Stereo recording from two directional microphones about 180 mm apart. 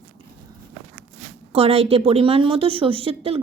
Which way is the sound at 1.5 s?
35° right (ahead or behind).